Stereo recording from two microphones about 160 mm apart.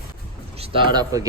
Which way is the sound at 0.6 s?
30° right (ahead or behind).